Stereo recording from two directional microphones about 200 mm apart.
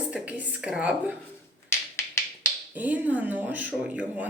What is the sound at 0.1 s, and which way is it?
A woman's voice, 5° right (ahead or behind).